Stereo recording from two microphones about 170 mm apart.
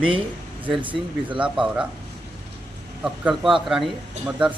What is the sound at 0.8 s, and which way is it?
Speech, 30° right (ahead or behind).